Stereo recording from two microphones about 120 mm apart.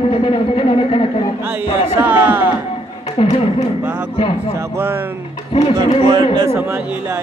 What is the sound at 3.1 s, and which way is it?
Music, 60° left (ahead or behind).